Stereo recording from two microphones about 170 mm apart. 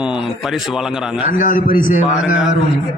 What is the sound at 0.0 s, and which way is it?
Speech, 5° right (ahead or behind).